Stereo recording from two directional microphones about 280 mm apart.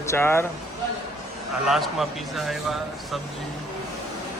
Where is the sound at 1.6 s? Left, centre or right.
Centre.